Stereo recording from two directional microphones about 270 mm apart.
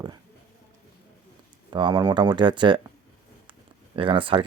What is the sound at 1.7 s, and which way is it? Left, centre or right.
Speech, centre.